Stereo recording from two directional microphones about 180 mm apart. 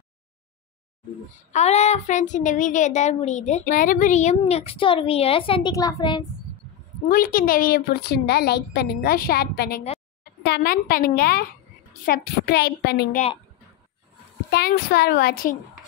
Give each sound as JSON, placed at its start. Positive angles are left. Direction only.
{"t": 1.5, "sound": "a child's voice", "side_deg": 35}
{"t": 5.8, "sound": "speech", "side_deg": 20}
{"t": 7.1, "sound": "a woman's voice", "side_deg": 50}
{"t": 14.5, "sound": "a woman's voice", "side_deg": 60}